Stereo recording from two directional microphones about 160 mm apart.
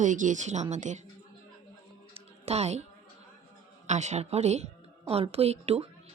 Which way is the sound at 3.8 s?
45° right (ahead or behind).